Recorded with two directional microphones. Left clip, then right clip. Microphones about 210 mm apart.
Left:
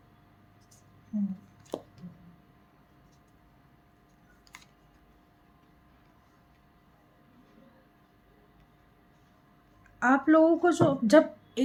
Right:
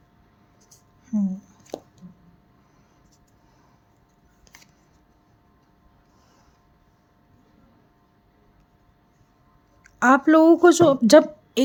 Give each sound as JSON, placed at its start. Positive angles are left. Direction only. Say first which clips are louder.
{"t": 1.1, "sound": "speech", "louder": "right 8 dB", "side_deg": -35}
{"t": 10.0, "sound": "a woman's voice", "louder": "right 6 dB", "side_deg": -50}